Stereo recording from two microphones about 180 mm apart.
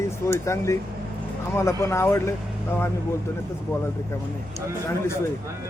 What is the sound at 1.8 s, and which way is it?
Speech, 15° left (ahead or behind).